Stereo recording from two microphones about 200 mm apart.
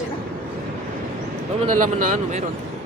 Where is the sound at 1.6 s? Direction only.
40° right (ahead or behind).